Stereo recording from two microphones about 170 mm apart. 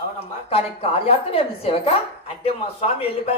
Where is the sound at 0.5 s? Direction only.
35° left (ahead or behind).